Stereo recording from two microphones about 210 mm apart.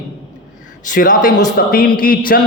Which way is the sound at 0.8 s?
40° left (ahead or behind).